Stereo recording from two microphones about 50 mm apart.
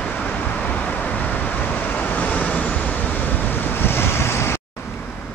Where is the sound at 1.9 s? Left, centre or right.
Left.